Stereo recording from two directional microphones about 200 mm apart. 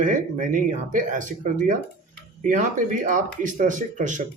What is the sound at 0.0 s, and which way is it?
Speech, 40° right (ahead or behind).